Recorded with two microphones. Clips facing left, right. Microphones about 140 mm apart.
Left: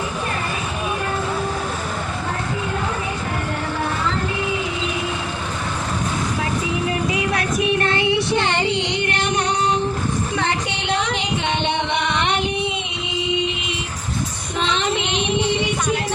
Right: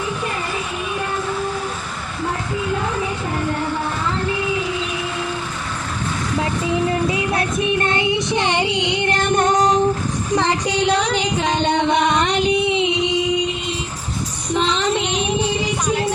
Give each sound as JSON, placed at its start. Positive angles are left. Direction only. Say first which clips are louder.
{"t": 7.3, "sound": "child singing", "louder": "even", "side_deg": -25}
{"t": 9.0, "sound": "music", "louder": "right 8 dB", "side_deg": -45}
{"t": 14.7, "sound": "child singing", "louder": "right 2 dB", "side_deg": -40}